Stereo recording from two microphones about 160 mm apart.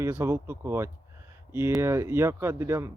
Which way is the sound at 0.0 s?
15° right (ahead or behind).